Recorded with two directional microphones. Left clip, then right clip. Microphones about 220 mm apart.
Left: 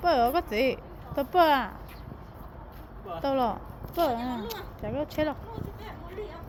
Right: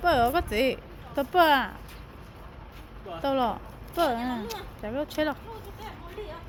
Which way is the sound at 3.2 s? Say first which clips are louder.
Right 1 dB; 15° right (ahead or behind).